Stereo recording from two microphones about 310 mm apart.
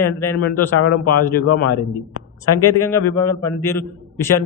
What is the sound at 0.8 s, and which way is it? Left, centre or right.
Speech, left.